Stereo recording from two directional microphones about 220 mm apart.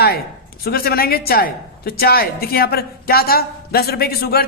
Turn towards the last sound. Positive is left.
turn(degrees=45)  # may be behind; listen again after turning